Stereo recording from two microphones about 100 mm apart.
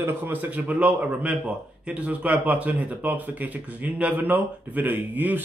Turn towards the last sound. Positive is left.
turn(degrees=-15)  # may be behind; listen again after turning